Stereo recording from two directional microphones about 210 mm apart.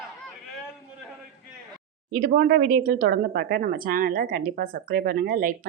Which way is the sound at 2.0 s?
45° right (ahead or behind).